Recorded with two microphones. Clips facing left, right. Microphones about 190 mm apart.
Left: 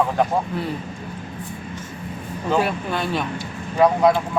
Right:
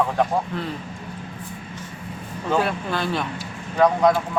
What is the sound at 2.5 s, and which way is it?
A man's voice, 5° left (ahead or behind).